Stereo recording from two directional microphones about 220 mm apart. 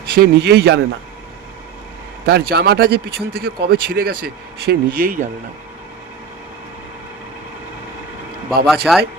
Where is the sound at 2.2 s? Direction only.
45° right (ahead or behind).